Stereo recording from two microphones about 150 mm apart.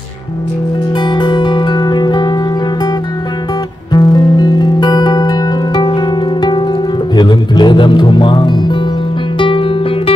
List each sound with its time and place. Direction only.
0.9 s music: 30° left (ahead or behind)
3.9 s music: 25° left (ahead or behind)